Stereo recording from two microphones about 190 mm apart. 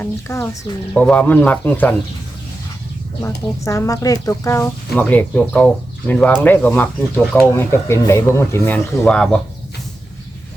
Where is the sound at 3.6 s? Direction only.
15° left (ahead or behind).